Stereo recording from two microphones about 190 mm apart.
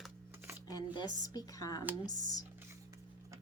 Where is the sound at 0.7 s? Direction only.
20° left (ahead or behind).